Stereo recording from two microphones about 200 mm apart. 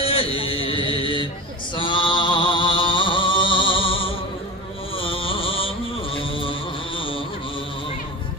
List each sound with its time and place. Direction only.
0.0 s mantra: 30° left (ahead or behind)
1.7 s music: 25° left (ahead or behind)
4.9 s a sound: 25° left (ahead or behind)